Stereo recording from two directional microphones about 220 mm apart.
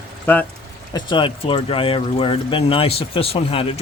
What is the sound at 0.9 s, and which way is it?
Speech, 20° left (ahead or behind).